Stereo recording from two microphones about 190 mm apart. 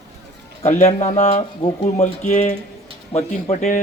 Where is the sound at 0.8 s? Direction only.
35° left (ahead or behind).